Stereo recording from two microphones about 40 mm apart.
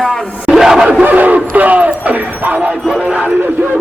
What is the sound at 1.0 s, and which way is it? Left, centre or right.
Speech, right.